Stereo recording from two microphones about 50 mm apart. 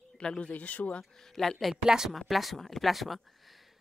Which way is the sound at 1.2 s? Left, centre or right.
Centre.